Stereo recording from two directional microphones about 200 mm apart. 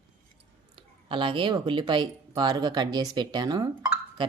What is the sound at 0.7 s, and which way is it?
Speech, 25° right (ahead or behind).